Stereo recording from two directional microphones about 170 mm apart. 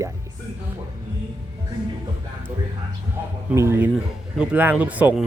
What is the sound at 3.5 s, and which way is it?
Speech, 15° right (ahead or behind).